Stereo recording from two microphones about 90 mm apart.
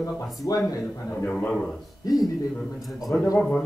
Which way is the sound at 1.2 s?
20° left (ahead or behind).